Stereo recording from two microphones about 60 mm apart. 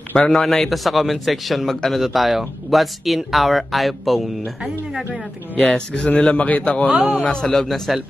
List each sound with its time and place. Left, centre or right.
0.1 s a man's voice: centre
0.5 s speech: centre
5.6 s speech: centre
6.0 s a man's voice: centre
7.4 s speech: centre